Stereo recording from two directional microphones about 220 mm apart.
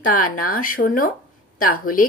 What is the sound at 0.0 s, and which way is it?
Speech, 40° left (ahead or behind).